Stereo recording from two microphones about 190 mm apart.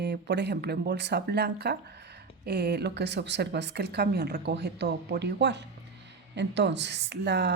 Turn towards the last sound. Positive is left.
turn(degrees=-65)  # may be behind; listen again after turning